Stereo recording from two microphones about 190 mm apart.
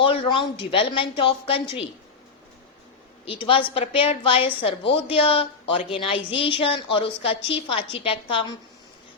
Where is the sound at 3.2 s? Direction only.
30° left (ahead or behind).